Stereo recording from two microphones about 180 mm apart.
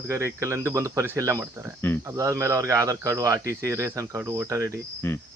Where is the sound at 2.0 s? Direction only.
15° right (ahead or behind).